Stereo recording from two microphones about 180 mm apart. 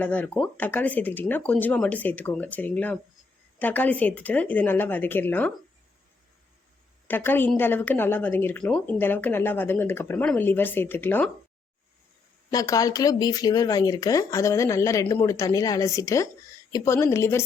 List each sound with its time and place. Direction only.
0.0 s speech: 10° left (ahead or behind)
7.1 s speech: 10° left (ahead or behind)
12.5 s speech: 20° left (ahead or behind)